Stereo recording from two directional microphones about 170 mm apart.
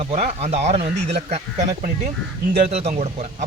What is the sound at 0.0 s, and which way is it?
A man's voice, 40° right (ahead or behind).